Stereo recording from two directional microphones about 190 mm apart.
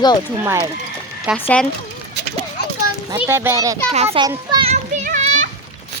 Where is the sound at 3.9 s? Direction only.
35° right (ahead or behind).